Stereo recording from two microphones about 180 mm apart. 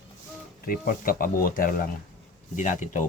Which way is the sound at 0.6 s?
50° left (ahead or behind).